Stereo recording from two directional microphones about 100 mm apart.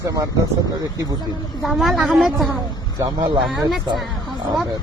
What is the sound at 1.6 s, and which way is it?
Speech, centre (ahead or behind).